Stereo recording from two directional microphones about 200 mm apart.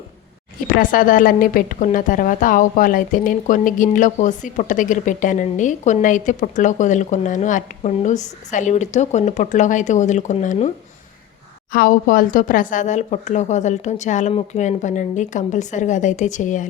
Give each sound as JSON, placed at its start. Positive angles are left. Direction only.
{"t": 0.7, "sound": "a woman's voice", "side_deg": 45}
{"t": 11.7, "sound": "a woman's voice", "side_deg": 45}